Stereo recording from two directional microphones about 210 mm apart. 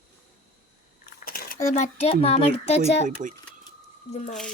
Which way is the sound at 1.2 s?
45° left (ahead or behind).